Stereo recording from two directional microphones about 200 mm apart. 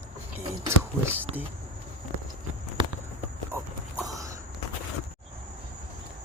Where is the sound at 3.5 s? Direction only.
15° right (ahead or behind).